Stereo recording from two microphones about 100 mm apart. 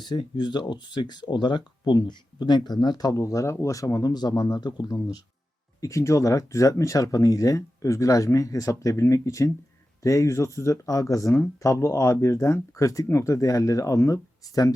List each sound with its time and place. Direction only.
0.0 s speech: 50° left (ahead or behind)